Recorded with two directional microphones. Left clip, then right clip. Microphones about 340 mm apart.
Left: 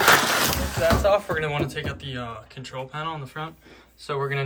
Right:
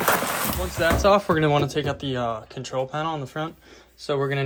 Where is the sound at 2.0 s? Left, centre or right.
Centre.